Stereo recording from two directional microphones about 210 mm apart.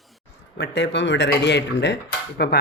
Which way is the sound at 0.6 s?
55° left (ahead or behind).